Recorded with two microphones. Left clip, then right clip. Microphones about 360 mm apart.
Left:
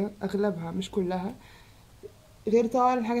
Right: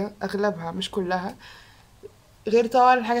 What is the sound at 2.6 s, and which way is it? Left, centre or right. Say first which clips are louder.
Speech: right 7 dB; right.